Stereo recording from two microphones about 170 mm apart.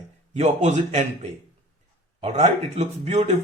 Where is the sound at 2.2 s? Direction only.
40° right (ahead or behind).